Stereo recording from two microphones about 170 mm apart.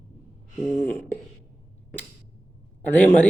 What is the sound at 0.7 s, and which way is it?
Speech, 15° left (ahead or behind).